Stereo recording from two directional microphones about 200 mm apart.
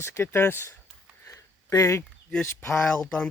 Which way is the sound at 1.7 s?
15° left (ahead or behind).